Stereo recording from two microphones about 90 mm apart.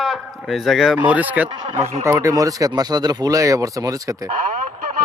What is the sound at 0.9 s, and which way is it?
Speech, 15° right (ahead or behind).